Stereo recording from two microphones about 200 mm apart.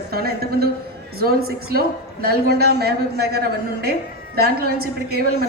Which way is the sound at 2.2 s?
50° right (ahead or behind).